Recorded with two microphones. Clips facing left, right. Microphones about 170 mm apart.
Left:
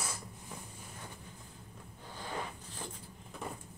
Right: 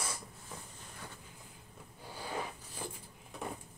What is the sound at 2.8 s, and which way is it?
Vehicle, centre (ahead or behind).